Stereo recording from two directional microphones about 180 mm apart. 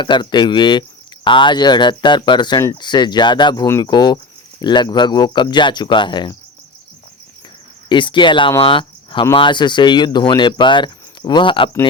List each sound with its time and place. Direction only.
0.0 s speech: 25° left (ahead or behind)
7.9 s speech: 25° left (ahead or behind)
8.6 s cricket: 30° left (ahead or behind)
9.3 s speech: 25° left (ahead or behind)